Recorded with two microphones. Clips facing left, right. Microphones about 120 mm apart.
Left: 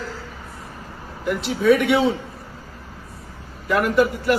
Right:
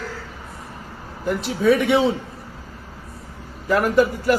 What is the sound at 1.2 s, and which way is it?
Speech, 35° right (ahead or behind).